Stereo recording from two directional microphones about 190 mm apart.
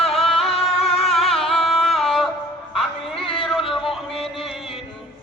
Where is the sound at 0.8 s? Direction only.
30° left (ahead or behind).